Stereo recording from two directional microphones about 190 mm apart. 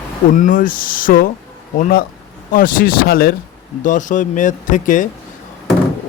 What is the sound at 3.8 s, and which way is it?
Speech, 40° left (ahead or behind).